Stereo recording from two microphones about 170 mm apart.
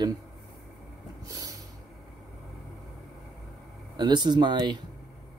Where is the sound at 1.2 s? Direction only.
20° right (ahead or behind).